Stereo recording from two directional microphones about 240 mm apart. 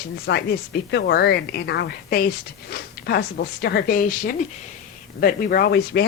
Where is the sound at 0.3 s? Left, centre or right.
Left.